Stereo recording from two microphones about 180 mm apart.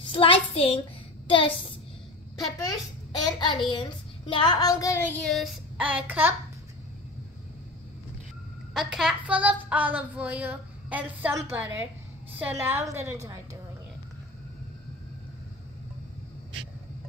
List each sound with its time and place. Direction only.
0.0 s child singing: 30° left (ahead or behind)
2.6 s a child's voice: 20° left (ahead or behind)
4.3 s child singing: 25° left (ahead or behind); by 6.3 s 10° right (ahead or behind)
8.7 s a woman's voice: 5° right (ahead or behind)